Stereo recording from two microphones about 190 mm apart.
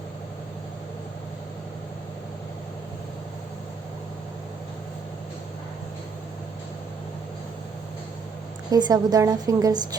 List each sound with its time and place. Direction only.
8.7 s a woman's voice: 20° right (ahead or behind)